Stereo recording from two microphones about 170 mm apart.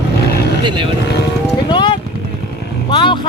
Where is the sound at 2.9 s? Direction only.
30° left (ahead or behind).